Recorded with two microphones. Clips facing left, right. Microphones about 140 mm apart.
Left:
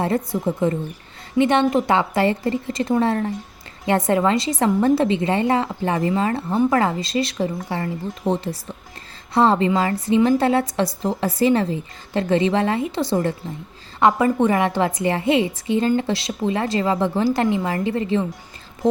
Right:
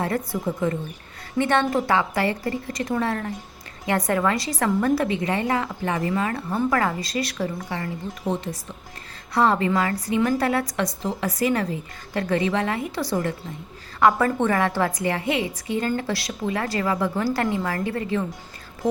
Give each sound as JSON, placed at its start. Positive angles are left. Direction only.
{"t": 0.0, "sound": "a woman's voice", "side_deg": 25}
{"t": 14.3, "sound": "a woman's voice", "side_deg": 15}